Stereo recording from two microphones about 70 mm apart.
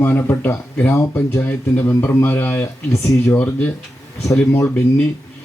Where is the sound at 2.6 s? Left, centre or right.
Left.